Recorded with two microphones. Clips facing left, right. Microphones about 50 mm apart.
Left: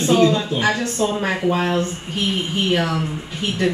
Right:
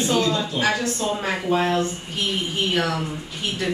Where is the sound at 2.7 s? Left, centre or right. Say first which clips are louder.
Left 3 dB; left.